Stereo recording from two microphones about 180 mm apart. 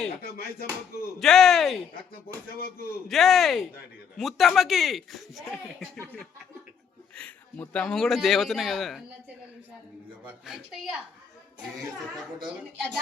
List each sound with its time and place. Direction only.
0.2 s speech: 55° left (ahead or behind)
1.2 s speech: centre (ahead or behind)
2.6 s speech: 60° left (ahead or behind)
3.1 s speech: centre (ahead or behind)
7.2 s speech: 10° left (ahead or behind)
10.4 s speech: centre (ahead or behind)